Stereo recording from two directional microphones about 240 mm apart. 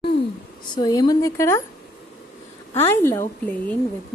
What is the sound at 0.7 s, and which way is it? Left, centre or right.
Speech, centre.